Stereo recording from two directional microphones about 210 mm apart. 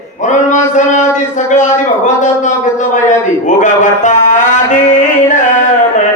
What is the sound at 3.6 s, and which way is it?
Music, 35° left (ahead or behind).